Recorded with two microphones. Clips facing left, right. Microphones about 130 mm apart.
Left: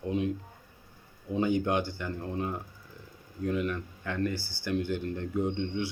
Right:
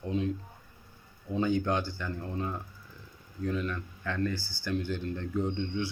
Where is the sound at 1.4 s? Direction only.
20° left (ahead or behind).